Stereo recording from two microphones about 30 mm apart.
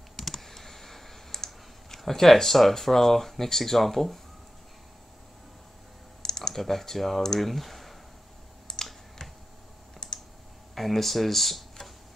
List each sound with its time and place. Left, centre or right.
0.3 s computer keyboard: centre
2.0 s speech: centre
6.2 s computer keyboard: centre
6.5 s speech: centre
8.7 s computer keyboard: left
9.9 s computer keyboard: centre
10.7 s speech: centre